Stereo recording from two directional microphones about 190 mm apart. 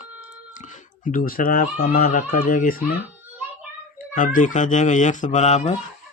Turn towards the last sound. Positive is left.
turn(degrees=35)  # may be behind; listen again after turning